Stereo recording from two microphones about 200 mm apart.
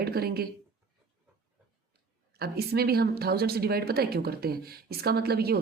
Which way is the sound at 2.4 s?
50° right (ahead or behind).